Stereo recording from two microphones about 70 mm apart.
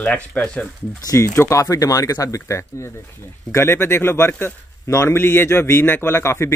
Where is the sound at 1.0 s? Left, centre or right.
Left.